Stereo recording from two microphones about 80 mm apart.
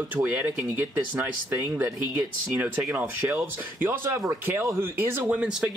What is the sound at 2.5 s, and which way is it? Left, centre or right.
Speech, centre.